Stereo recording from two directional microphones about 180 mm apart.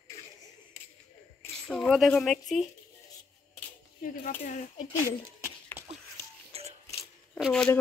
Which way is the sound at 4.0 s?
50° left (ahead or behind).